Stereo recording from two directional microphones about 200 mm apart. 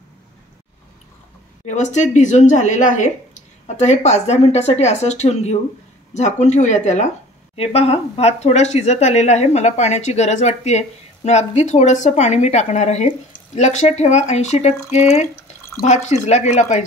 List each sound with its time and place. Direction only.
1.7 s speech: 35° left (ahead or behind)